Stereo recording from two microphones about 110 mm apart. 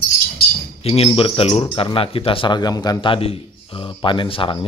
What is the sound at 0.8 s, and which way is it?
Speech, 65° left (ahead or behind).